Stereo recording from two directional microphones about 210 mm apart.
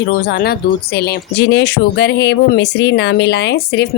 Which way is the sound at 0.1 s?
50° left (ahead or behind).